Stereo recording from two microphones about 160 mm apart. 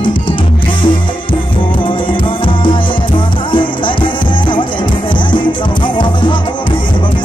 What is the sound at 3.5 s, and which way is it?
Music, 30° left (ahead or behind).